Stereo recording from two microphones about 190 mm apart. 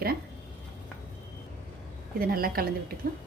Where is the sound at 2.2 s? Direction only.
50° right (ahead or behind).